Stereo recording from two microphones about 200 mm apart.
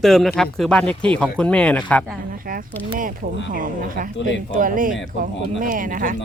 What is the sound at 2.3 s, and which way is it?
Speech, 45° right (ahead or behind).